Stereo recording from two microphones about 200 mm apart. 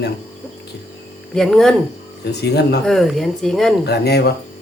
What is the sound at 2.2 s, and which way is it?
Speech, 55° left (ahead or behind).